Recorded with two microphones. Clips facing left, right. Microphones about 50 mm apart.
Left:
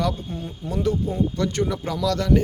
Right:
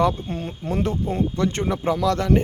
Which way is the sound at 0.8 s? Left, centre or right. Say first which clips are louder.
Left 1 dB; right.